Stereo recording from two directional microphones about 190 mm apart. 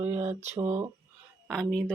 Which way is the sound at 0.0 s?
35° right (ahead or behind).